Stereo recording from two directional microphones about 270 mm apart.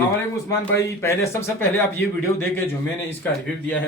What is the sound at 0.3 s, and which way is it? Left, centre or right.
Speech, centre.